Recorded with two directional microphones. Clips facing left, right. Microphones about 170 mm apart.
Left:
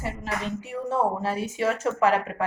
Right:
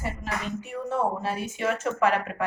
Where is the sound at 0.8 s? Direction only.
35° left (ahead or behind).